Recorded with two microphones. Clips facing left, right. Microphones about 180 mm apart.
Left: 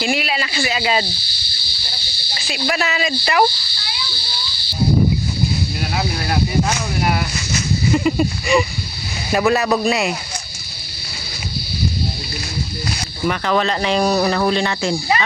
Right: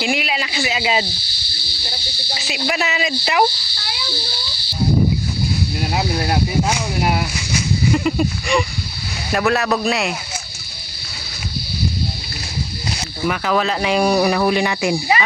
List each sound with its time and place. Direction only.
0.0 s speech: 15° right (ahead or behind)
2.5 s speech: 15° right (ahead or behind)
2.9 s speech: 5° right (ahead or behind)
6.7 s speech: 15° right (ahead or behind)
7.9 s speech: centre (ahead or behind)
13.2 s speech: 5° right (ahead or behind)